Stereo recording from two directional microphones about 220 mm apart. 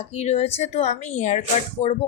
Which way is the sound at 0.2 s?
30° left (ahead or behind).